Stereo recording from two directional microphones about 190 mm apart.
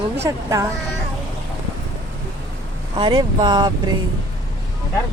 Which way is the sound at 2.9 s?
25° right (ahead or behind).